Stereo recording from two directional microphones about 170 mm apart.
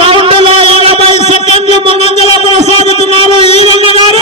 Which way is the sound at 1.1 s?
40° left (ahead or behind).